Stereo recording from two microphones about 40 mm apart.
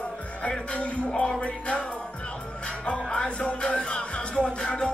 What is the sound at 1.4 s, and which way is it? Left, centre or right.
Music, left.